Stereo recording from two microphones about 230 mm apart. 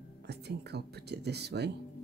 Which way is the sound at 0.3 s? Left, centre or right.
Right.